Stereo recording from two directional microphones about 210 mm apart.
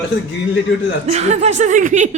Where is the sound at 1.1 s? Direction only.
30° right (ahead or behind).